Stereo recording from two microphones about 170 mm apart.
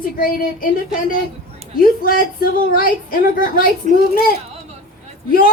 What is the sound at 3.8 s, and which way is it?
Speech, 45° right (ahead or behind).